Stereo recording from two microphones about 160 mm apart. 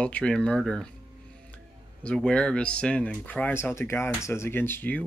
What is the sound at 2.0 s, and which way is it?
Speech, 5° left (ahead or behind).